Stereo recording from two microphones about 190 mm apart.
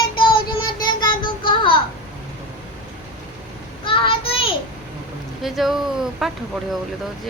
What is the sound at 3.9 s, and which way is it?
Speech, 30° left (ahead or behind).